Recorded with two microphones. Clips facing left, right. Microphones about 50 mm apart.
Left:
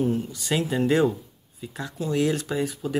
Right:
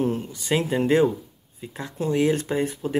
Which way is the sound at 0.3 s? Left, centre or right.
Right.